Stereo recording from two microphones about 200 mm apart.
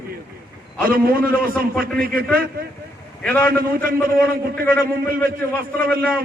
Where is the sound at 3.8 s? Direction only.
50° right (ahead or behind).